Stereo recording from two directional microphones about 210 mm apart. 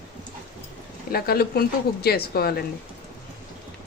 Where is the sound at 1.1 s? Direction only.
45° left (ahead or behind).